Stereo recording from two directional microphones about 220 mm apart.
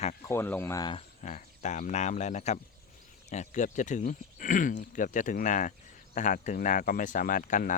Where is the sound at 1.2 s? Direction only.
35° left (ahead or behind).